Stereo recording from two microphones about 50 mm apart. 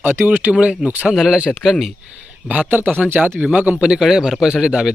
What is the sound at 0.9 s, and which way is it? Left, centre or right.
Speech, right.